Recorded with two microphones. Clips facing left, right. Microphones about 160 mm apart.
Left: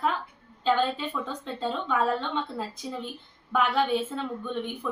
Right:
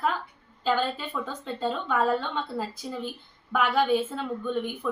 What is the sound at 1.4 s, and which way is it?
A woman's voice, 5° right (ahead or behind).